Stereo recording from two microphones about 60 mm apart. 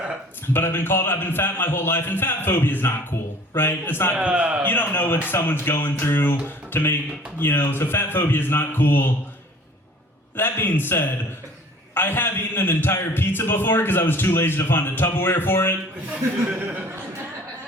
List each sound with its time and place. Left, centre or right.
0.5 s a man's voice: left
4.1 s a man's voice: centre
4.6 s a man's voice: left
10.3 s a man's voice: left
16.6 s speech: right